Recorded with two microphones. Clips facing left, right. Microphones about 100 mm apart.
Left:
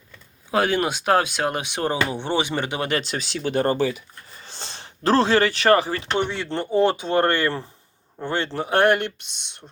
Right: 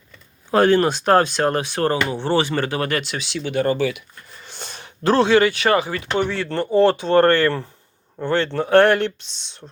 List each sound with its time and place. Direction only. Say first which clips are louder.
0.5 s speech: right 6 dB; 10° left (ahead or behind)
3.0 s speech: even; 40° left (ahead or behind)
6.1 s speech: right 4 dB; 20° left (ahead or behind)